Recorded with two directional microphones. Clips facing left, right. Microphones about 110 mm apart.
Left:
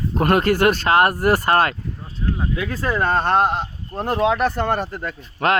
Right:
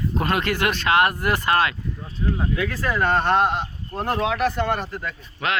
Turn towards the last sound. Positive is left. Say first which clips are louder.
# left 6 dB
turn(degrees=45)  # may be behind; listen again after turning